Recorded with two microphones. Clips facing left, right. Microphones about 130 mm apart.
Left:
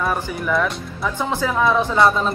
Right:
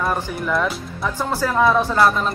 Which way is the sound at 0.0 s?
Centre (ahead or behind).